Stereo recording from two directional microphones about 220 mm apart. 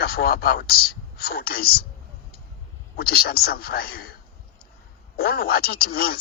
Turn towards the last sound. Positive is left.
turn(degrees=45)  # may be behind; listen again after turning